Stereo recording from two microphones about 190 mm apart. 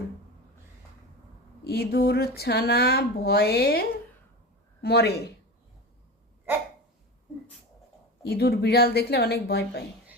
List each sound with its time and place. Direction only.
1.6 s speech: 55° left (ahead or behind)
8.2 s speech: 55° left (ahead or behind)